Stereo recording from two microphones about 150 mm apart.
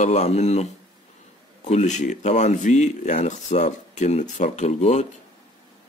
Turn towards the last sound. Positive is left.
turn(degrees=50)  # may be behind; listen again after turning